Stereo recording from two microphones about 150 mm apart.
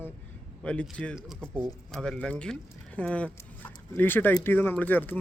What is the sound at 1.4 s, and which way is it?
Speech, 15° right (ahead or behind).